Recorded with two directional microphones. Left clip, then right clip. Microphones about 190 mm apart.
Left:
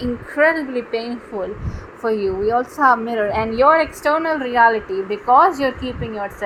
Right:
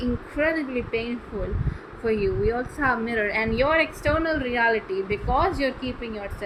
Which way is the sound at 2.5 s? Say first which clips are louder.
Left 9 dB; 15° left (ahead or behind).